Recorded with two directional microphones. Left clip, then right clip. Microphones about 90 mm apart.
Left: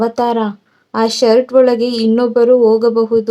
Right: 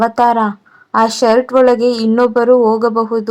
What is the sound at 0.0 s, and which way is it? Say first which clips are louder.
A woman's voice: right 3 dB; 10° right (ahead or behind).